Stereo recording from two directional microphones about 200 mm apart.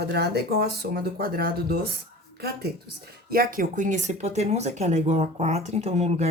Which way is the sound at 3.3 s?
45° right (ahead or behind).